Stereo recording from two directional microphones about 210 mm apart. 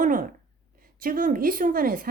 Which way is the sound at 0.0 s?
40° right (ahead or behind).